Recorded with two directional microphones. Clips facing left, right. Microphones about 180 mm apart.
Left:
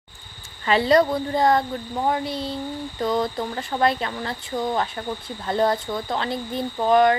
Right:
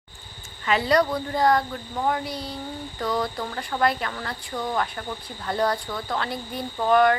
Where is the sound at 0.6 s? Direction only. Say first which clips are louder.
Left 3 dB; 30° left (ahead or behind).